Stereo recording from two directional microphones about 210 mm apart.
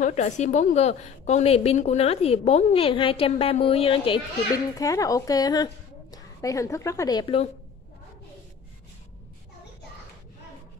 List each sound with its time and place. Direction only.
0.0 s a woman's voice: 30° left (ahead or behind)